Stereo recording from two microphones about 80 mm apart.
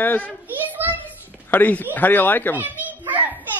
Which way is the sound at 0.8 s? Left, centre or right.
Right.